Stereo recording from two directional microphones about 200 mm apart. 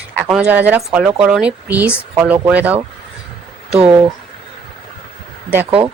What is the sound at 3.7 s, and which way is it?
Speech, 30° right (ahead or behind).